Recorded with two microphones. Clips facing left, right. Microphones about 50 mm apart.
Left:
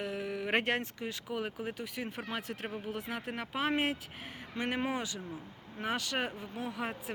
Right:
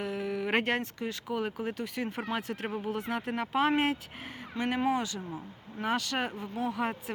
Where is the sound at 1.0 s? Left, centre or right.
Centre.